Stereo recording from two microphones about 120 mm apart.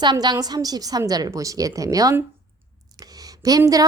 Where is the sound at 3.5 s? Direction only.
30° right (ahead or behind).